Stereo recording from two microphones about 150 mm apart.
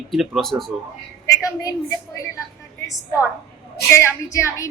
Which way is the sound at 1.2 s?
20° left (ahead or behind).